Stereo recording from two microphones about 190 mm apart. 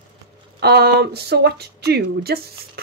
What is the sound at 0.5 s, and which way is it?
Speech, 60° right (ahead or behind).